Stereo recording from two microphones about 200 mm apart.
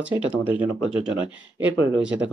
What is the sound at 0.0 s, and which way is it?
Speech, 5° right (ahead or behind).